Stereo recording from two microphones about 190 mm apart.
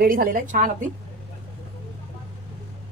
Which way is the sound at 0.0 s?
50° right (ahead or behind).